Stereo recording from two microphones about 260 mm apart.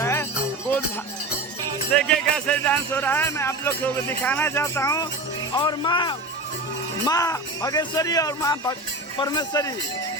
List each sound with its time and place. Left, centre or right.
0.0 s music: centre
1.9 s speech: centre